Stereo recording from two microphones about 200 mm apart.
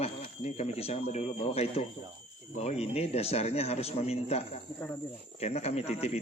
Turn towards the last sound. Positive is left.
turn(degrees=30)  # may be behind; listen again after turning